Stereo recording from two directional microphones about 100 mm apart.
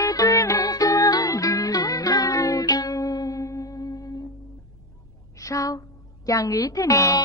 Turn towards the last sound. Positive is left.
turn(degrees=35)  # may be behind; listen again after turning